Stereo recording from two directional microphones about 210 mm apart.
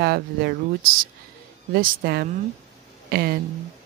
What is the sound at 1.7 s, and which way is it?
Speech, 50° right (ahead or behind).